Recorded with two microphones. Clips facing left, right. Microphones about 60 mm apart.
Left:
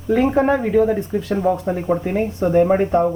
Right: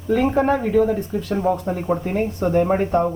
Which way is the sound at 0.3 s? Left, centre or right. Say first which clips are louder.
Left 2 dB; centre.